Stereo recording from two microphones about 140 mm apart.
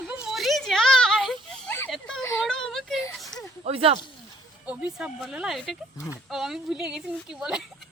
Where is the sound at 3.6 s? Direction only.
45° right (ahead or behind).